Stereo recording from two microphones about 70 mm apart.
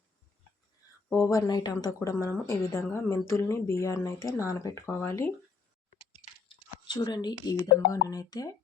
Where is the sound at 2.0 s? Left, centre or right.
Left.